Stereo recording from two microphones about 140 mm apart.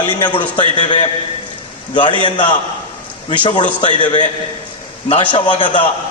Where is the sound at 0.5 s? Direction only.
35° left (ahead or behind).